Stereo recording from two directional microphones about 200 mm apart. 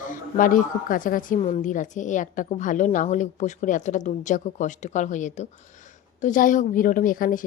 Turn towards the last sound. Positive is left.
turn(degrees=45)  # may be behind; listen again after turning